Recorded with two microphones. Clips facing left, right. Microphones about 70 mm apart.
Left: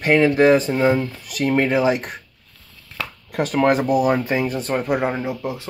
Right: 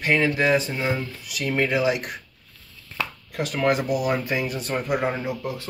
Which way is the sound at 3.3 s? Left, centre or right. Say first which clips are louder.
Left 5 dB; left.